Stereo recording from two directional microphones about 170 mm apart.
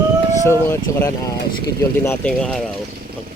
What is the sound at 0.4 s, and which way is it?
Speech, 15° left (ahead or behind).